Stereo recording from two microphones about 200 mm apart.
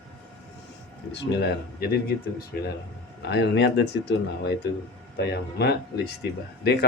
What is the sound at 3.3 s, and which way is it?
Speech, 55° left (ahead or behind).